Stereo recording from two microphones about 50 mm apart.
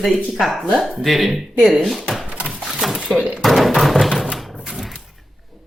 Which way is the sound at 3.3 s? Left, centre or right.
Centre.